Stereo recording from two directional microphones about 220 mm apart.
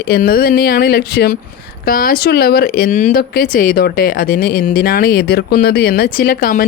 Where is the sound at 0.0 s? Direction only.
40° left (ahead or behind).